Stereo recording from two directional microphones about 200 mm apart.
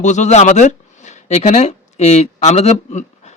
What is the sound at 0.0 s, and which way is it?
Speech, 35° left (ahead or behind).